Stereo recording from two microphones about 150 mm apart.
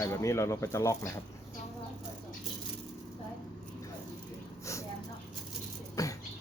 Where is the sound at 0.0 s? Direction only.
20° left (ahead or behind).